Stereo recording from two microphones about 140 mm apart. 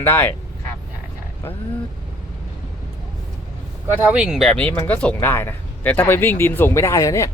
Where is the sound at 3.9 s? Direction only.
10° right (ahead or behind); by 7.2 s 20° left (ahead or behind).